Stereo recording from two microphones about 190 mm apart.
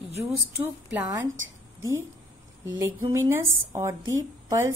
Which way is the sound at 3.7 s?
15° right (ahead or behind).